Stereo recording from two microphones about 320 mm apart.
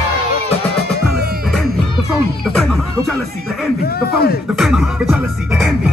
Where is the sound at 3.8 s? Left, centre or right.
Left.